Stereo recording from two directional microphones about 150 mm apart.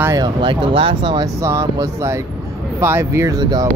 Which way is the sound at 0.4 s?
35° right (ahead or behind).